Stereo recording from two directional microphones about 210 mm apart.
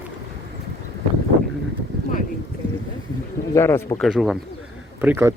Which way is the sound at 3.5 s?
15° left (ahead or behind).